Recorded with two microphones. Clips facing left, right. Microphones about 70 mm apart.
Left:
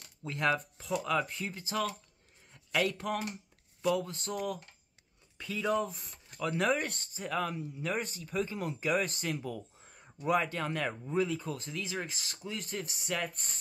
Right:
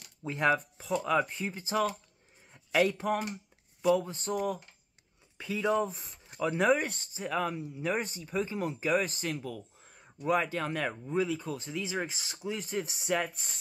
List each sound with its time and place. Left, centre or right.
0.2 s speech: centre
1.7 s speech: centre
2.8 s speech: centre
5.4 s speech: centre
13.0 s speech: centre
13.3 s speech: centre